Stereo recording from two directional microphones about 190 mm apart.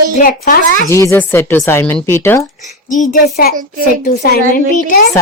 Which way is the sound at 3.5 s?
45° right (ahead or behind).